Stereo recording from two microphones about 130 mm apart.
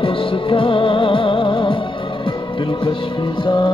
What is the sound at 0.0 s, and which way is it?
Music, 45° left (ahead or behind).